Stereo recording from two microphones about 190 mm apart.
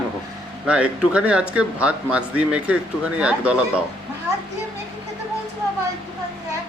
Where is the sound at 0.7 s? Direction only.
5° right (ahead or behind).